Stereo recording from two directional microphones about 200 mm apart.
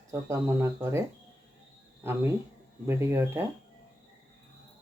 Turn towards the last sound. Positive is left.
turn(degrees=-10)  # may be behind; listen again after turning